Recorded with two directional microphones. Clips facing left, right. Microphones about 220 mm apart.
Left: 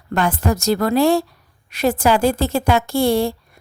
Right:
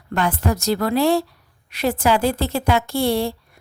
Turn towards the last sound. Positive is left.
turn(degrees=45)  # may be behind; listen again after turning